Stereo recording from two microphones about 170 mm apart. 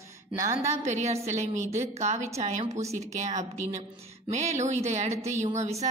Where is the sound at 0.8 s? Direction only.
40° right (ahead or behind).